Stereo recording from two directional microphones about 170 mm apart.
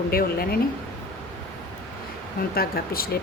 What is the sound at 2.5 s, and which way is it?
Speech, 65° left (ahead or behind).